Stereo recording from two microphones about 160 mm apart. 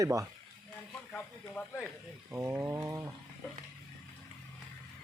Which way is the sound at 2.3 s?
15° right (ahead or behind).